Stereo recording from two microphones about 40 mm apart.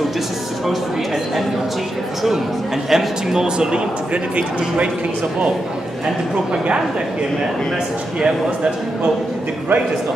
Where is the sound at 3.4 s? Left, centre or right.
Right.